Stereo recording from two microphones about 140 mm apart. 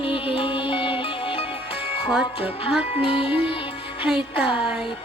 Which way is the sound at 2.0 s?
5° right (ahead or behind).